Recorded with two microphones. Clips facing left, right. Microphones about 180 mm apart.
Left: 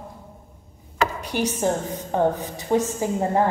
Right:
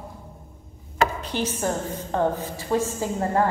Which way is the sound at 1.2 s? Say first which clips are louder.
Left 3 dB; 15° left (ahead or behind).